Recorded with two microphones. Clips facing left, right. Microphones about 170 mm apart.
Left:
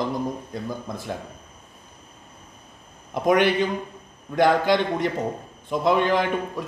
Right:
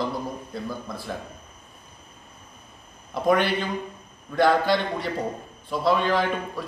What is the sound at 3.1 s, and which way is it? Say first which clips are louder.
A man's voice: left 2 dB; 15° left (ahead or behind).